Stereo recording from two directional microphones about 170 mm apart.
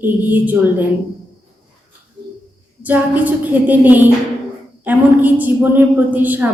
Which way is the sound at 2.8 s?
10° right (ahead or behind).